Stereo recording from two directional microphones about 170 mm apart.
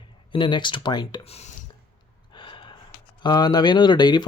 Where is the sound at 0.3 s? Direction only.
30° left (ahead or behind).